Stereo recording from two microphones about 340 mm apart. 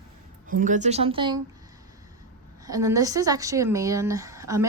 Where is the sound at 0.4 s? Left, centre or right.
Right.